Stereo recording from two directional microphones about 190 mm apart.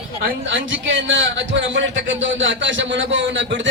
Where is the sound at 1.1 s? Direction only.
75° right (ahead or behind).